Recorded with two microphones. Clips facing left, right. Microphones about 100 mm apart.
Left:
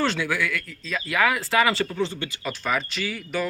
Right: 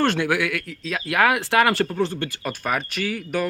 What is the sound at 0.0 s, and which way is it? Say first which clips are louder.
Speech: right 4 dB; 55° right (ahead or behind).